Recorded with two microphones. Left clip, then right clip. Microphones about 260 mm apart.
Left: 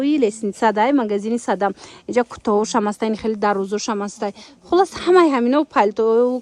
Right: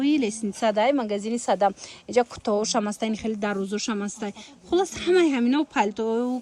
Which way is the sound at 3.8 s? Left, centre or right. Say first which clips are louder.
Left 7 dB; centre.